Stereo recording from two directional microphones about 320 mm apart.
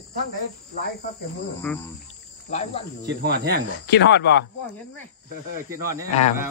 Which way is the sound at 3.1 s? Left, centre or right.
Right.